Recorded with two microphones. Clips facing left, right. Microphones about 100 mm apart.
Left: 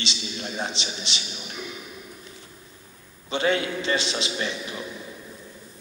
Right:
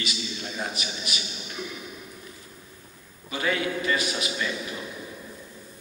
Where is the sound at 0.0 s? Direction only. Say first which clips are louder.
Left 1 dB; 25° left (ahead or behind).